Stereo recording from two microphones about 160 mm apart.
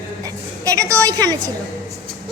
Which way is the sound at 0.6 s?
20° right (ahead or behind).